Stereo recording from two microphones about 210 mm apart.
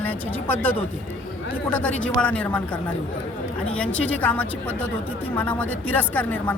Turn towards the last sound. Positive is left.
turn(degrees=10)  # may be behind; listen again after turning